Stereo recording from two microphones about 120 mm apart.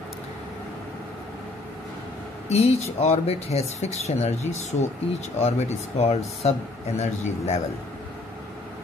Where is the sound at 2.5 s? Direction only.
60° left (ahead or behind).